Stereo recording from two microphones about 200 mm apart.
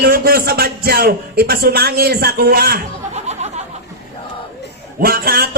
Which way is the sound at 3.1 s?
35° right (ahead or behind).